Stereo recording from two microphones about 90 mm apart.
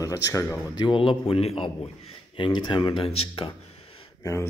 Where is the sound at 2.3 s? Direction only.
65° left (ahead or behind); by 3.5 s 85° left.